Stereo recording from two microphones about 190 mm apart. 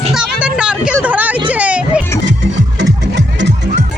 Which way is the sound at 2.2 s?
70° right (ahead or behind).